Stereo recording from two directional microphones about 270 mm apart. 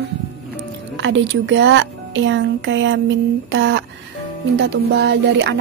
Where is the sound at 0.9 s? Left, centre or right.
Right.